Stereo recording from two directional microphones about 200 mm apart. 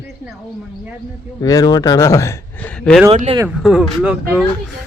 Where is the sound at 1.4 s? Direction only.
20° left (ahead or behind).